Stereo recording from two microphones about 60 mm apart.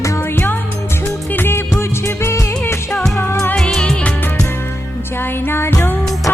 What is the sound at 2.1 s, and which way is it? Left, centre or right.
Music, left.